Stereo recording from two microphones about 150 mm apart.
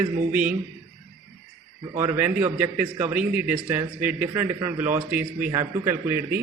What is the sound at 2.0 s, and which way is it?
A man's voice, 10° right (ahead or behind).